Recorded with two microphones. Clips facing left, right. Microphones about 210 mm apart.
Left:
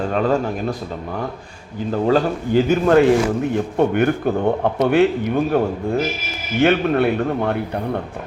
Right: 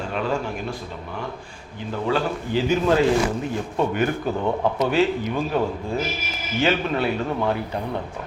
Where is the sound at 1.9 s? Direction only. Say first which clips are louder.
Left 6 dB; 40° left (ahead or behind); by 5.6 s 60° left (ahead or behind).